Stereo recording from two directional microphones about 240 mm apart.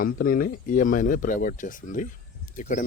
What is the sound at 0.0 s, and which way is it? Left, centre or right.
Speech, left.